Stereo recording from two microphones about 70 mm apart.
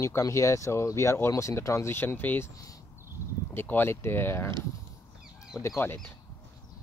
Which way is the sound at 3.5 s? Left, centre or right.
Left.